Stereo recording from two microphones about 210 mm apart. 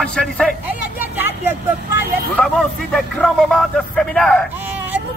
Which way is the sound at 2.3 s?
5° left (ahead or behind).